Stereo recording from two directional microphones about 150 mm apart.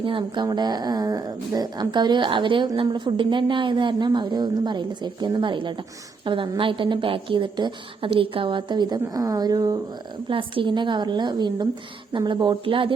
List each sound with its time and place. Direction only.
0.0 s speech: 35° right (ahead or behind)
10.2 s speech: 35° right (ahead or behind)